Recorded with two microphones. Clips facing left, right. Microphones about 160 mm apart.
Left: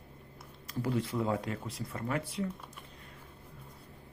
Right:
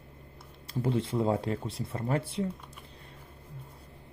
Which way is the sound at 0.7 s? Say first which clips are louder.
Right 3 dB; 25° right (ahead or behind).